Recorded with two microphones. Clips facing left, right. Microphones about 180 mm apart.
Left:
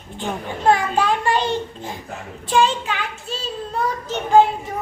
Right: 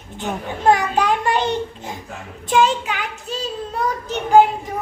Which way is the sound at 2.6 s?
15° right (ahead or behind).